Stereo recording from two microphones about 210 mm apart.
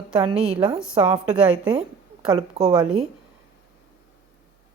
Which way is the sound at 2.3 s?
30° right (ahead or behind).